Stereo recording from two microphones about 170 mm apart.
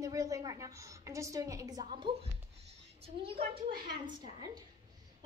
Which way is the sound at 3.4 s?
65° right (ahead or behind).